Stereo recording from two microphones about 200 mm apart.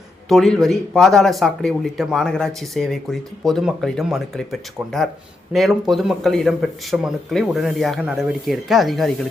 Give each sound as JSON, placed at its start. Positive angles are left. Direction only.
{"t": 0.3, "sound": "speech", "side_deg": 0}